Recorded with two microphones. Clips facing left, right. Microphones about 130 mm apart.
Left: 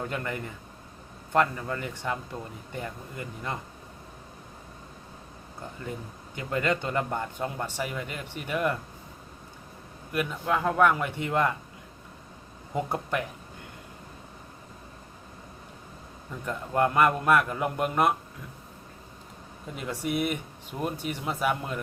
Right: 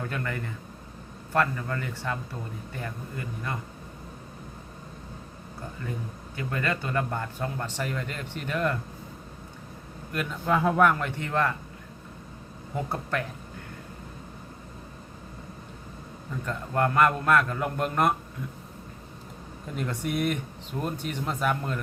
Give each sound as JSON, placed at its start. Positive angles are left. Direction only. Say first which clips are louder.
{"t": 0.0, "sound": "speech", "louder": "even", "side_deg": 20}
{"t": 6.3, "sound": "speech", "louder": "left 2 dB", "side_deg": 20}
{"t": 10.1, "sound": "a man's voice", "louder": "right 1 dB", "side_deg": 5}
{"t": 10.9, "sound": "speech", "louder": "left 1 dB", "side_deg": 15}
{"t": 12.7, "sound": "speech", "louder": "left 1 dB", "side_deg": 15}
{"t": 16.5, "sound": "speech", "louder": "left 1 dB", "side_deg": 15}
{"t": 19.7, "sound": "speech", "louder": "even", "side_deg": 5}